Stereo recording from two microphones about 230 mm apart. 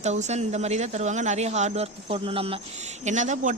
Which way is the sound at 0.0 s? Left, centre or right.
Right.